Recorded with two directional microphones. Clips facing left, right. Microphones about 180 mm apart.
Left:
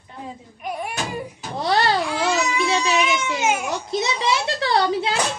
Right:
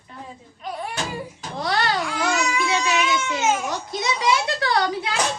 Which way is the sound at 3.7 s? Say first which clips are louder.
Left 2 dB; 25° left (ahead or behind).